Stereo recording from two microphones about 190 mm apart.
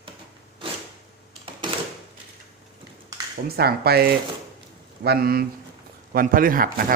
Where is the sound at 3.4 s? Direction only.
55° right (ahead or behind).